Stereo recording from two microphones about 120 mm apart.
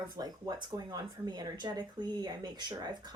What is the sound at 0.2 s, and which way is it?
Speech, 35° right (ahead or behind).